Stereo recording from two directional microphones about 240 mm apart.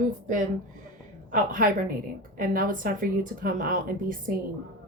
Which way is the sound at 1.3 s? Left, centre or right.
Right.